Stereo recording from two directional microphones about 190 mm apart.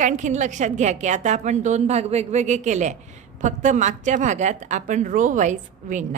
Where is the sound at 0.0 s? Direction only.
40° right (ahead or behind).